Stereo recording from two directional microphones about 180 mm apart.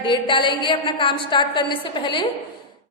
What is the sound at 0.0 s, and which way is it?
A woman's voice, 25° left (ahead or behind).